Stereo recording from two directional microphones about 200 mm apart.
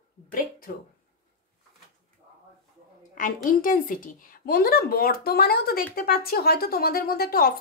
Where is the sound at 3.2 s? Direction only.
45° left (ahead or behind).